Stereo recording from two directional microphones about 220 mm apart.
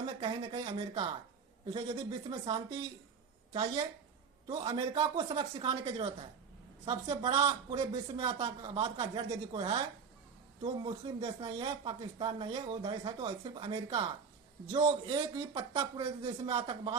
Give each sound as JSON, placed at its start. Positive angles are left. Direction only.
{"t": 0.0, "sound": "speech", "side_deg": -20}
{"t": 6.8, "sound": "speech", "side_deg": -20}
{"t": 16.2, "sound": "speech", "side_deg": -30}